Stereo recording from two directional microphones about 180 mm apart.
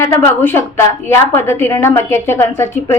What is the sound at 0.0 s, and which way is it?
A woman's voice, 15° left (ahead or behind).